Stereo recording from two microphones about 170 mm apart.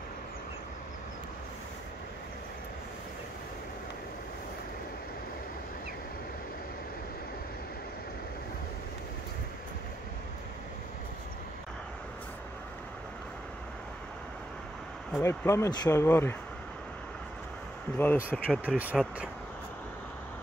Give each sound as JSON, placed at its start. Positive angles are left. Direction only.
{"t": 15.2, "sound": "speech", "side_deg": 15}
{"t": 17.9, "sound": "speech", "side_deg": 10}